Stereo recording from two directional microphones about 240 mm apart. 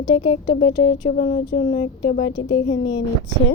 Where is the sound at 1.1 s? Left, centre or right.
Left.